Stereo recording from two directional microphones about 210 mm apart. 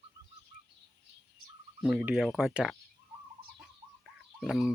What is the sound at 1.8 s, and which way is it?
Speech, 5° right (ahead or behind).